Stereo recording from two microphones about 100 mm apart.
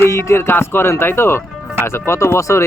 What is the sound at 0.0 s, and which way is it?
Speech, 25° left (ahead or behind).